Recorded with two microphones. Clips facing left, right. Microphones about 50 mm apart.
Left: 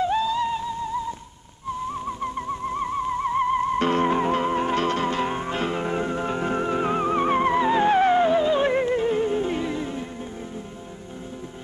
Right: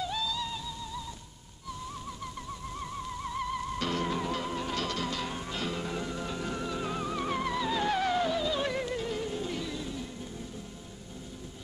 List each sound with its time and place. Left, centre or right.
0.0 s music: left
2.0 s theremin: left